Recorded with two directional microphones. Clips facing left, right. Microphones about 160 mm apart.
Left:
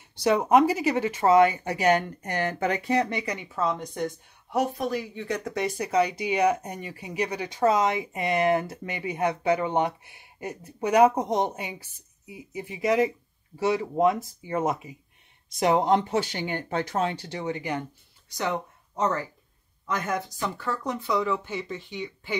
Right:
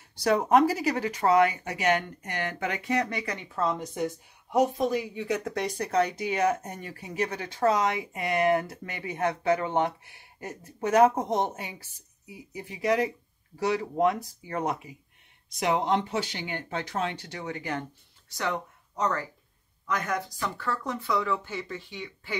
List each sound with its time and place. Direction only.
0.2 s speech: 20° left (ahead or behind)
3.5 s speech: centre (ahead or behind)
4.5 s speech: 20° right (ahead or behind); by 15.0 s 25° left (ahead or behind)
15.6 s speech: 40° left (ahead or behind); by 19.2 s 25° left (ahead or behind)
20.3 s speech: 15° left (ahead or behind)